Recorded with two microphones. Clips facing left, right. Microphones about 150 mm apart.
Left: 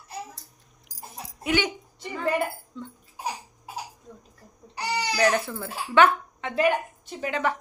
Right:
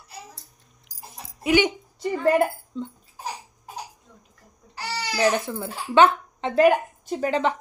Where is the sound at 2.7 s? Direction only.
30° right (ahead or behind).